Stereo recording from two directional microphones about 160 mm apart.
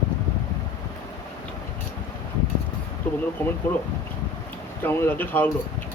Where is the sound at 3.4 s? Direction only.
15° left (ahead or behind).